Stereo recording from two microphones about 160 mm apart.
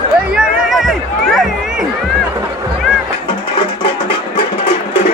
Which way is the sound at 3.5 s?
30° left (ahead or behind).